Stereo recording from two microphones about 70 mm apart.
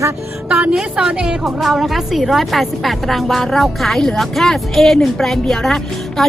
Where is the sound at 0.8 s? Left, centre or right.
Centre.